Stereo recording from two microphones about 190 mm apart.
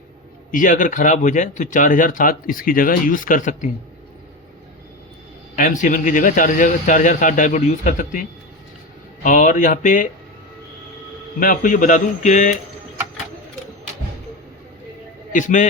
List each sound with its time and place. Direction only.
0.5 s speech: 45° left (ahead or behind)
5.5 s speech: 45° left (ahead or behind)
9.2 s speech: 45° left (ahead or behind)
11.3 s speech: 45° left (ahead or behind)
15.3 s a man's voice: 45° left (ahead or behind)